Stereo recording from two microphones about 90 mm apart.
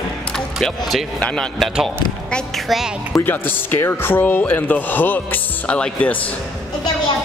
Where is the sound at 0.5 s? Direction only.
Centre (ahead or behind).